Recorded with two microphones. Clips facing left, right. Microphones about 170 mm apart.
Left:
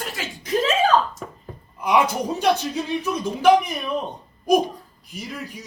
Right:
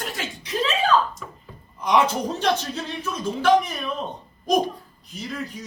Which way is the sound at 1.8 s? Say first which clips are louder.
Even; 10° left (ahead or behind).